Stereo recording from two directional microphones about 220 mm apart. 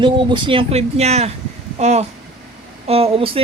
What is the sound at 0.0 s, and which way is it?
Speech, 20° right (ahead or behind).